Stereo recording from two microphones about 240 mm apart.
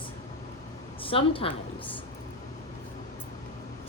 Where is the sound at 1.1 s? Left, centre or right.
Left.